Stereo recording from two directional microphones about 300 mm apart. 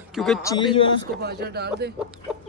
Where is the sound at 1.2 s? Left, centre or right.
Right.